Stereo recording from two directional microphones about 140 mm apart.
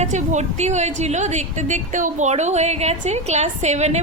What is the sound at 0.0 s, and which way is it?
A woman's voice, 55° right (ahead or behind).